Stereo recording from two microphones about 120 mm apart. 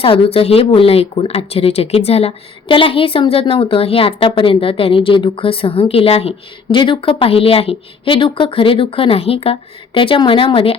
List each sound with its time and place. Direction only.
0.0 s speech: 50° left (ahead or behind)